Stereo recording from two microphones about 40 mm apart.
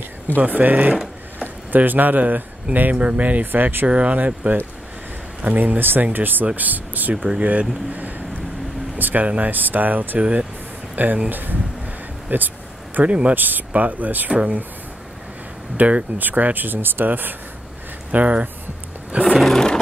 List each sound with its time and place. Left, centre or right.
0.4 s speech: right
2.9 s speech: right
3.8 s speech: right
7.2 s speech: right
8.9 s air conditioning: right
9.4 s speech: right
13.3 s speech: right
15.8 s speech: right
18.1 s speech: right
19.5 s music: centre